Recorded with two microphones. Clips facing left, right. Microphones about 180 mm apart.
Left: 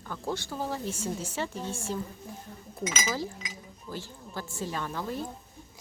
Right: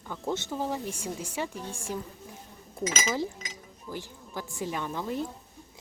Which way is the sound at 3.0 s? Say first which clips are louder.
Right 2 dB; 20° right (ahead or behind).